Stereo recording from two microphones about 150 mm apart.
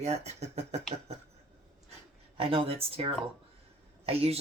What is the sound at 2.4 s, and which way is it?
Speech, 40° right (ahead or behind).